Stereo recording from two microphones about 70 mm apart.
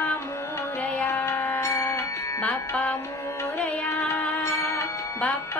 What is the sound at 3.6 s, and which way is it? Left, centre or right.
Music, left.